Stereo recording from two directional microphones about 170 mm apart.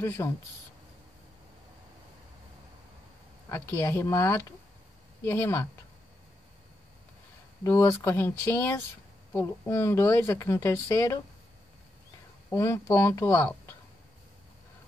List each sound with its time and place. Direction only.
0.2 s speech: 20° left (ahead or behind)
3.4 s speech: 15° left (ahead or behind)
7.6 s speech: 15° left (ahead or behind)
12.5 s speech: 15° left (ahead or behind)